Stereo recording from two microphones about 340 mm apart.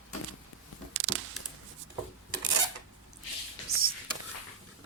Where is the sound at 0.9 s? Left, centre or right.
Right.